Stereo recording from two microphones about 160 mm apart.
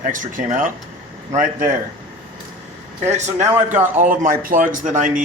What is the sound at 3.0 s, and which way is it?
A man's voice, 45° right (ahead or behind).